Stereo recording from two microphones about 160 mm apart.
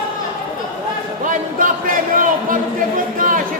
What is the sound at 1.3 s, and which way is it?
Speech, 55° right (ahead or behind).